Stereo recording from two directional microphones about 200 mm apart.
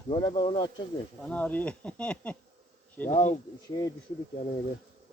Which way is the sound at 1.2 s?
5° left (ahead or behind).